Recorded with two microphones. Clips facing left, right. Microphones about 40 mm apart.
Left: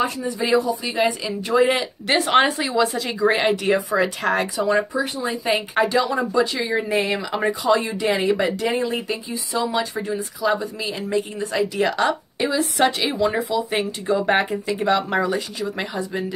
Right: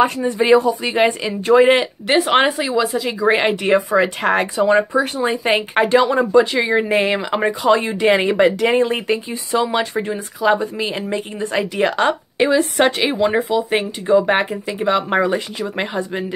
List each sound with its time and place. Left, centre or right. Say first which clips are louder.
0.0 s speech: right 7 dB; right
1.7 s speech: right 6 dB; centre
3.6 s speech: right 4 dB; right
4.9 s speech: right 6 dB; right
5.3 s speech: right 4 dB; right
13.7 s speech: right 9 dB; centre
15.0 s speech: right 4 dB; right